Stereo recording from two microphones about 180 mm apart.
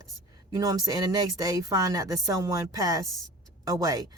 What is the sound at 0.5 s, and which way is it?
Speech, 20° right (ahead or behind).